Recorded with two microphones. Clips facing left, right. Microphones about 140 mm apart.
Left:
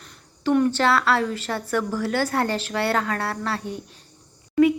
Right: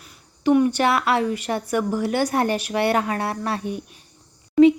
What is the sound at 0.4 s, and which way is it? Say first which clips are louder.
A woman's voice: right 2 dB; 15° right (ahead or behind).